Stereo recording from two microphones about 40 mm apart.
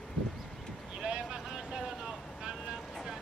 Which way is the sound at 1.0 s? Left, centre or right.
Right.